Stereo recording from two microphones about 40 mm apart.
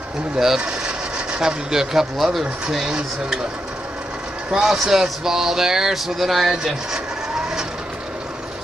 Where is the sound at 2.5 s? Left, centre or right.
Centre.